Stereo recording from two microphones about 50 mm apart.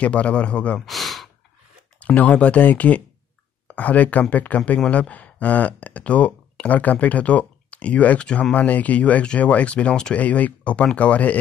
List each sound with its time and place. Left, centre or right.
0.0 s speech: left
0.8 s sigh: centre
2.0 s speech: left
10.1 s speech: left